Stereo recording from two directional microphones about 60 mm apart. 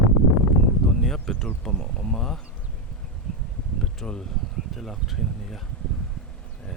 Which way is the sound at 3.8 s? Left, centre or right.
Centre.